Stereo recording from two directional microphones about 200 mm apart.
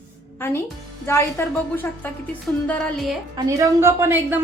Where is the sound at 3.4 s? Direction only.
15° right (ahead or behind).